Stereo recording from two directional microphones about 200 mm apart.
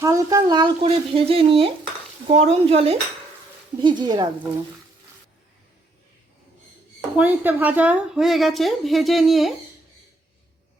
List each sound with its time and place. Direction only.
0.0 s speech: 15° right (ahead or behind)
7.2 s a woman's voice: 10° right (ahead or behind)